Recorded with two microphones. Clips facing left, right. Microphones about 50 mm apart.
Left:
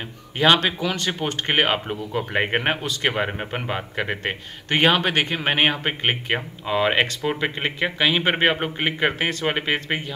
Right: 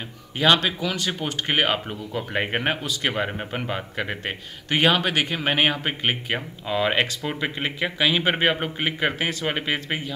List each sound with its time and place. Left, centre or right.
0.7 s speech: centre